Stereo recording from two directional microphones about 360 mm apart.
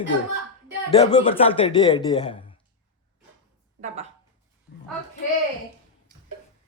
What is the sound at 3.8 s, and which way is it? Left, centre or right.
Speech, centre.